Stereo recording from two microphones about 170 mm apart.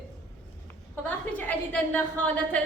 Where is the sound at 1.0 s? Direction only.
10° left (ahead or behind).